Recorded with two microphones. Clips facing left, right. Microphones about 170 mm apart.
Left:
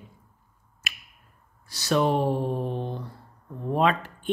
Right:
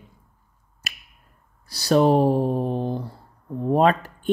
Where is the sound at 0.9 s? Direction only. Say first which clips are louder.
Even; 40° right (ahead or behind).